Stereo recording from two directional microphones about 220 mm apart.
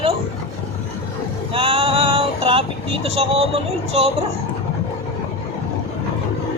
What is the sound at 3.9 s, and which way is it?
Speech, 25° right (ahead or behind).